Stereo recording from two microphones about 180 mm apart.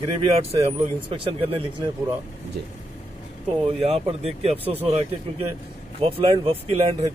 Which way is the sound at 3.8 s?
35° right (ahead or behind).